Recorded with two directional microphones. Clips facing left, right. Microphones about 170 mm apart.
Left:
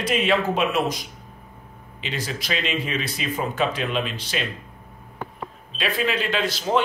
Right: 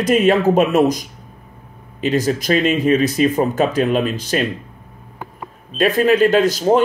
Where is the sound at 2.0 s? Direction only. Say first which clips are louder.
Right 13 dB; 45° right (ahead or behind).